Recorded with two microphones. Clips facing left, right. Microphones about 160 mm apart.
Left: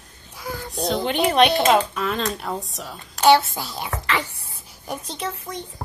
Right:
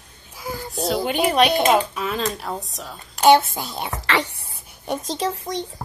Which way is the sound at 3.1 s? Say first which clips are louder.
Right 1 dB; 15° right (ahead or behind).